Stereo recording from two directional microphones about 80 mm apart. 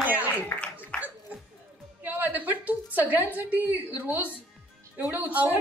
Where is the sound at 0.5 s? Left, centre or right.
Left.